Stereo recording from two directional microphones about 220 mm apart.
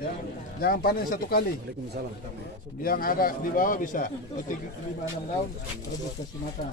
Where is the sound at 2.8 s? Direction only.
40° left (ahead or behind).